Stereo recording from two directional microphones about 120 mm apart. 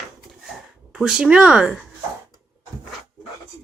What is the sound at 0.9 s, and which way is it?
Speech, 5° right (ahead or behind).